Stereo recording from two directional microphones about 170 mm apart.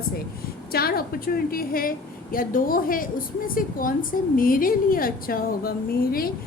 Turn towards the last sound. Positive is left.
turn(degrees=60)  # may be behind; listen again after turning